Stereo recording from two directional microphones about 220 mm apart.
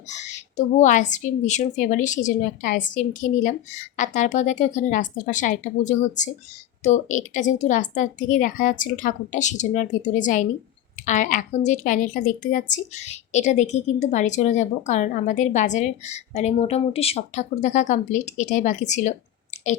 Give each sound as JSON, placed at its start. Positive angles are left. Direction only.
{"t": 0.1, "sound": "a woman's voice", "side_deg": 30}